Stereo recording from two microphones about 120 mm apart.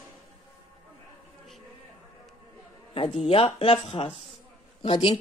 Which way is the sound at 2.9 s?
50° left (ahead or behind).